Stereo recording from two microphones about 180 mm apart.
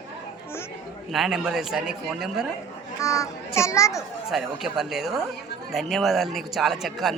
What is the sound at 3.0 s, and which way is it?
A child's voice, 15° left (ahead or behind).